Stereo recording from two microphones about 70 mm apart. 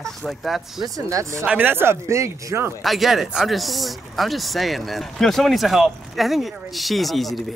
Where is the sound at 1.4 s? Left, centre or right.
Right.